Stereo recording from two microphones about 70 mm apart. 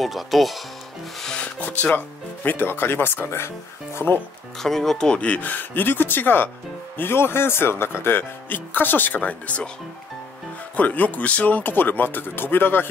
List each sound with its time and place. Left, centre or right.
0.0 s speech: centre
1.2 s speech: centre; by 4.2 s left
4.6 s speech: centre
10.8 s speech: left